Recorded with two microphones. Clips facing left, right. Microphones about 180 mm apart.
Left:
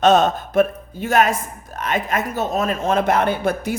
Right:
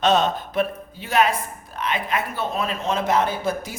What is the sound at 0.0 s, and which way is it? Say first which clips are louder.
A man's voice: left 5 dB; 45° left (ahead or behind).